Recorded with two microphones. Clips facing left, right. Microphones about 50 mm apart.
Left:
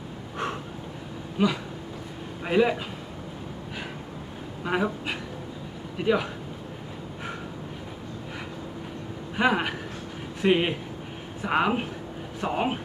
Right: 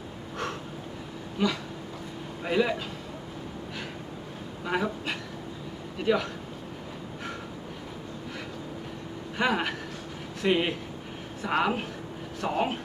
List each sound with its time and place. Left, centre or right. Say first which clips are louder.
1.4 s a man's voice: left 3 dB; centre
4.6 s speech: left 2 dB; centre
9.3 s speech: left 3 dB; centre